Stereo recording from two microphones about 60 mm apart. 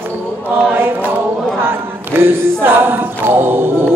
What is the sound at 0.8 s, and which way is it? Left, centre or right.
Choir, right.